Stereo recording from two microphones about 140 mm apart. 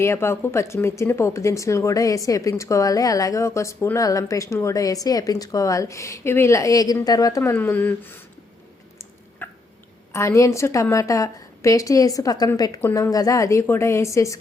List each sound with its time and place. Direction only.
0.0 s speech: 20° left (ahead or behind)
7.5 s speech: 15° left (ahead or behind)
9.4 s hiccup: 15° left (ahead or behind)
10.1 s speech: 20° left (ahead or behind)